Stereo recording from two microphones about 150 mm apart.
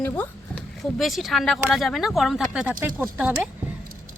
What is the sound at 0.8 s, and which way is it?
Speech, centre (ahead or behind).